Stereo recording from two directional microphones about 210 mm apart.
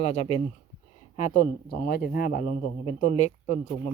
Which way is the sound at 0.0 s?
30° left (ahead or behind).